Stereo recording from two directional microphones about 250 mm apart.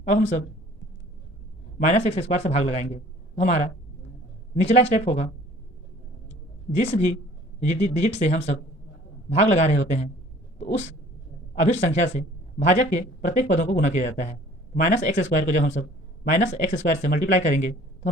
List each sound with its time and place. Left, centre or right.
0.0 s speech: left
1.8 s speech: left
6.7 s speech: left
11.6 s speech: left